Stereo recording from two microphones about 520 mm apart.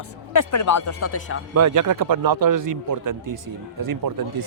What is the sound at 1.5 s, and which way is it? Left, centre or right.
Speech, right.